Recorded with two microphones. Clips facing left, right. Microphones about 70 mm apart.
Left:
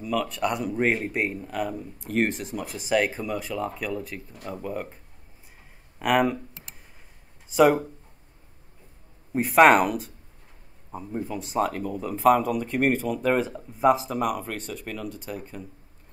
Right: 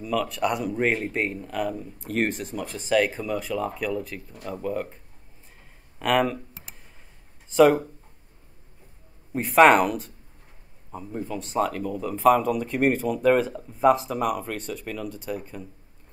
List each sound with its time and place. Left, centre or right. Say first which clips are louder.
0.0 s speech: right 1 dB; centre
7.5 s speech: right 2 dB; centre
9.3 s speech: even; centre